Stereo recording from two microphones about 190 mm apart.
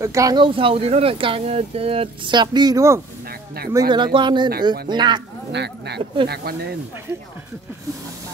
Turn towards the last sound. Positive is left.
turn(degrees=-55)  # may be behind; listen again after turning